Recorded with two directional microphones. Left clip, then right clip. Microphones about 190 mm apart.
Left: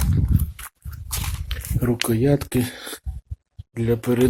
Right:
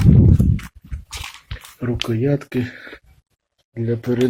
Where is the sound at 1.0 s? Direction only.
20° left (ahead or behind).